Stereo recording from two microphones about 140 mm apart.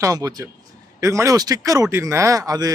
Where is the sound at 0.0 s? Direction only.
25° right (ahead or behind).